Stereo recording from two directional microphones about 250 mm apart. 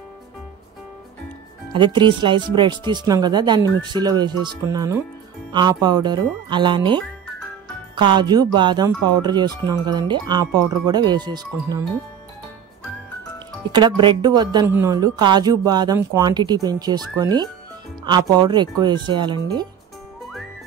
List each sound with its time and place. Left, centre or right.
1.7 s speech: centre
13.7 s speech: centre